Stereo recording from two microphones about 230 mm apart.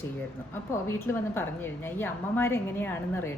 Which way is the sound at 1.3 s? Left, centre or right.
Centre.